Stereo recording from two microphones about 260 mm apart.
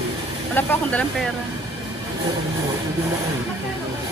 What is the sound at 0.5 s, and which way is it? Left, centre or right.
Speech, centre.